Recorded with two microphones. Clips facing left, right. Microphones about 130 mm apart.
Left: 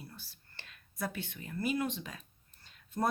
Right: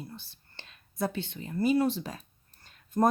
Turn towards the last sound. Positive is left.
turn(degrees=-45)  # may be behind; listen again after turning